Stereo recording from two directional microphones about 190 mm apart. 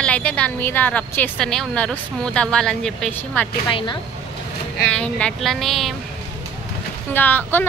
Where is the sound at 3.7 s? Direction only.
25° left (ahead or behind).